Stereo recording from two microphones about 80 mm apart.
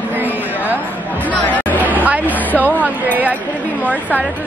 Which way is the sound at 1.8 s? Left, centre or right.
Right.